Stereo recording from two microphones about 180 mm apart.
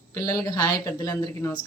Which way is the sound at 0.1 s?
20° left (ahead or behind).